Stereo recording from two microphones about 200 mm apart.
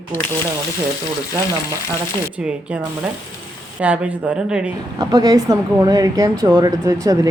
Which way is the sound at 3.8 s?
5° right (ahead or behind).